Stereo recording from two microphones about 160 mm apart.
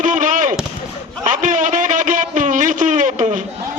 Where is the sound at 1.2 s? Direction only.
50° right (ahead or behind).